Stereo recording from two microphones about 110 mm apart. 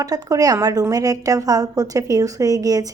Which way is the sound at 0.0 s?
35° right (ahead or behind).